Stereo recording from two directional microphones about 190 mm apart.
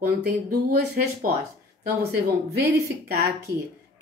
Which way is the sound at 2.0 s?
60° right (ahead or behind).